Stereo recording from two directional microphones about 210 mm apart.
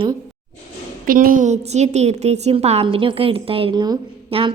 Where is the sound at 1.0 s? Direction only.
40° right (ahead or behind).